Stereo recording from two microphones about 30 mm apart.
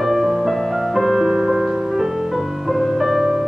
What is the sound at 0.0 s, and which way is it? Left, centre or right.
Music, centre.